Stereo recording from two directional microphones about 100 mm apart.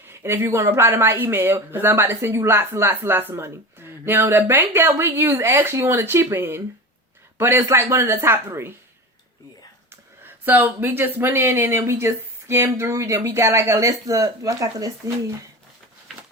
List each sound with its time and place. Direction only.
0.0 s speech: 25° right (ahead or behind)
9.9 s speech: 20° right (ahead or behind); by 15.1 s 35° right (ahead or behind)